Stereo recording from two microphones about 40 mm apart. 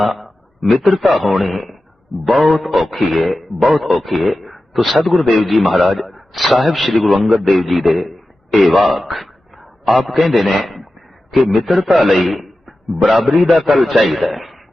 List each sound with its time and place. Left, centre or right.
0.0 s a man's voice: centre
12.0 s a sound: centre
13.1 s speech: centre